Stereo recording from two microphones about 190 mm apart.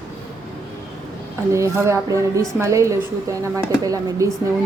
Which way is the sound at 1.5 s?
15° right (ahead or behind).